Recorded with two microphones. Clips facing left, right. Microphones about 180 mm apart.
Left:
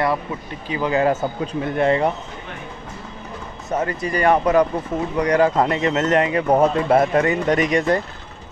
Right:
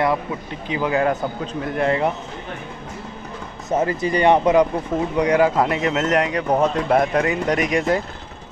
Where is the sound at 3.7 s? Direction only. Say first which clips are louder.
Right 3 dB; 25° right (ahead or behind); by 8.0 s centre (ahead or behind).